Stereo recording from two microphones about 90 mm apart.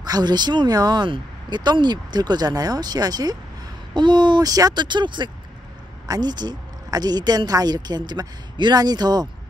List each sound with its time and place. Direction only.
0.0 s speech: 50° right (ahead or behind)
3.9 s speech: 55° right (ahead or behind)
6.0 s speech: 50° right (ahead or behind)